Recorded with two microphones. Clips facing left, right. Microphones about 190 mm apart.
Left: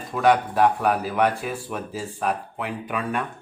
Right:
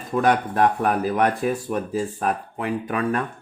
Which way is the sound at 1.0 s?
45° right (ahead or behind).